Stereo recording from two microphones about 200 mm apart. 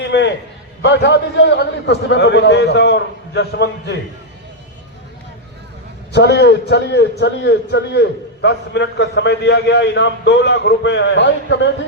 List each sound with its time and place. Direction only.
0.0 s a sound: 60° left (ahead or behind)
0.8 s a man's voice: 60° left (ahead or behind)
6.1 s a man's voice: 55° left (ahead or behind)